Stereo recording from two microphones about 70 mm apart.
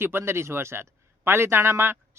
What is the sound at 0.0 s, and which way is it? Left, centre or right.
Speech, right.